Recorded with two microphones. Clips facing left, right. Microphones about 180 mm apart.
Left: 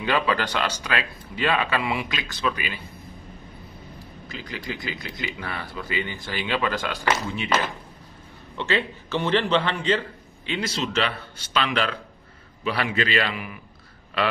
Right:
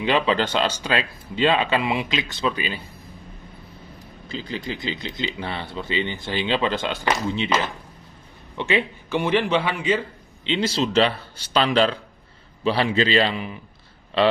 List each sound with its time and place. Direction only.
0.0 s speech: 25° right (ahead or behind)
4.3 s a man's voice: 30° right (ahead or behind); by 10.0 s 10° right (ahead or behind)
10.4 s a man's voice: 25° right (ahead or behind)